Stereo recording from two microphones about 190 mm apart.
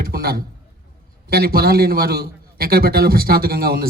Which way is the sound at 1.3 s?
55° right (ahead or behind).